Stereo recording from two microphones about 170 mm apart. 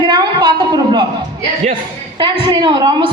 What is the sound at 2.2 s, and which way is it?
Speech, 25° right (ahead or behind).